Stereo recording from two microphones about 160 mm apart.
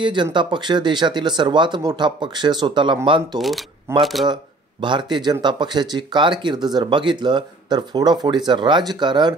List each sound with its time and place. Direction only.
0.0 s speech: 30° right (ahead or behind)
3.3 s speech: centre (ahead or behind)
4.8 s speech: 30° right (ahead or behind)